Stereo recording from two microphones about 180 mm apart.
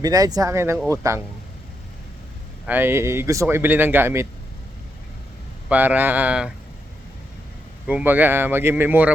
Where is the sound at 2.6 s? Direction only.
10° right (ahead or behind).